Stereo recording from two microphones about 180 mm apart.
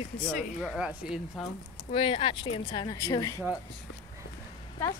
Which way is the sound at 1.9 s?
30° left (ahead or behind).